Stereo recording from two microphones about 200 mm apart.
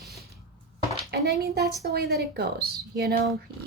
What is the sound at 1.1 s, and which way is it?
A woman's voice, 55° right (ahead or behind).